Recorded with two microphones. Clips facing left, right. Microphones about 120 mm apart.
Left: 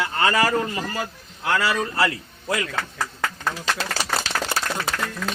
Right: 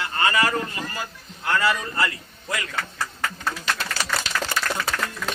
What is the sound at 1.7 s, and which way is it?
Speech, 80° left.